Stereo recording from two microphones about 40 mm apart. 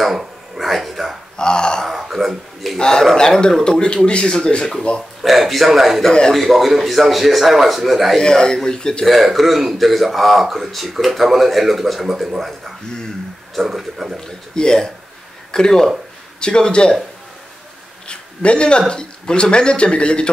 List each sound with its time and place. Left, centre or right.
0.6 s a sound: centre
1.3 s a sound: centre
1.9 s a sound: centre
2.8 s a man's voice: centre
5.2 s a man's voice: centre
8.2 s speech: centre
9.0 s a man's voice: centre
14.2 s speech: centre
18.0 s speech: left